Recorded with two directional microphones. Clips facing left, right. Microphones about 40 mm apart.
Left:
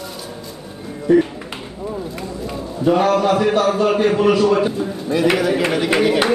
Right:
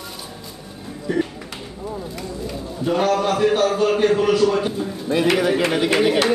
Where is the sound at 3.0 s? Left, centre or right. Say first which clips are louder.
Left 2 dB; centre.